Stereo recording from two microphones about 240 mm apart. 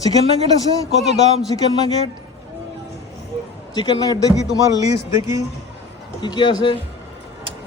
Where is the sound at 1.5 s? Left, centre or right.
Centre.